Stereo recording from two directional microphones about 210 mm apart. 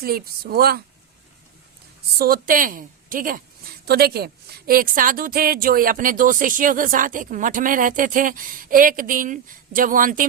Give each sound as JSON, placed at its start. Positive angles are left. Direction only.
{"t": 0.0, "sound": "a woman's voice", "side_deg": -45}
{"t": 2.1, "sound": "a woman's voice", "side_deg": -45}